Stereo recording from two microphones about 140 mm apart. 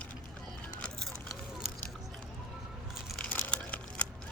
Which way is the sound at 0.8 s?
5° left (ahead or behind).